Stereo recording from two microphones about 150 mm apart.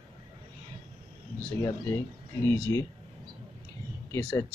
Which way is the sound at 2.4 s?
15° left (ahead or behind).